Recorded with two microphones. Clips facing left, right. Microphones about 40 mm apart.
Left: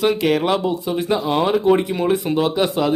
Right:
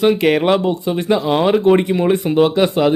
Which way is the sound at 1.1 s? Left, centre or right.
Centre.